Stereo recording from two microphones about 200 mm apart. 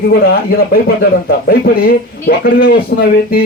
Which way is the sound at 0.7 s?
50° left (ahead or behind).